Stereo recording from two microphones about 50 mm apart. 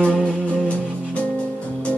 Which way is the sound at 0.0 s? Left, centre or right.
Left.